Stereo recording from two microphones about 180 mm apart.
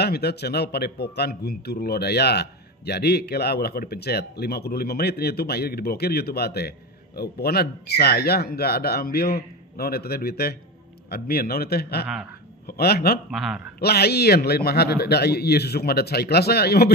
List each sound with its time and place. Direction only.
0.0 s a man's voice: 65° left (ahead or behind)
13.3 s speech: centre (ahead or behind)
13.7 s a man's voice: 60° left (ahead or behind)